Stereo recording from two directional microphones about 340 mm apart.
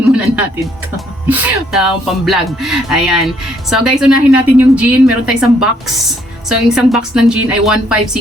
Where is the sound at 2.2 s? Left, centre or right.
Centre.